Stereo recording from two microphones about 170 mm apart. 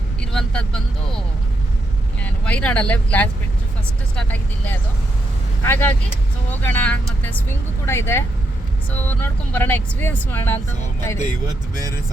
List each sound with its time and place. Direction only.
0.2 s speech: 5° left (ahead or behind)
2.2 s speech: 10° left (ahead or behind)
11.4 s speech: 20° right (ahead or behind)